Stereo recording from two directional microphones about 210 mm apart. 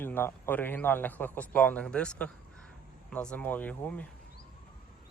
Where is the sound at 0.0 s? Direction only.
10° left (ahead or behind).